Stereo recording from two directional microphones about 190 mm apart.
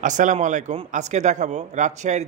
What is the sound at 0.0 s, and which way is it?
Speech, 40° right (ahead or behind).